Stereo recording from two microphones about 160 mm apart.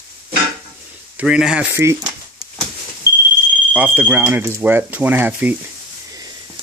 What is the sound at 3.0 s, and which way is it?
Smoke detector, 25° left (ahead or behind).